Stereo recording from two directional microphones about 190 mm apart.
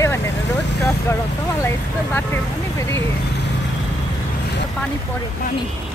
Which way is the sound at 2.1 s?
10° left (ahead or behind).